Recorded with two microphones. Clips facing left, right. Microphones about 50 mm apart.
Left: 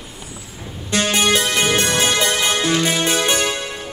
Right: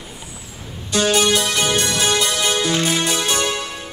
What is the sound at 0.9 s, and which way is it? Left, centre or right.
Music, left.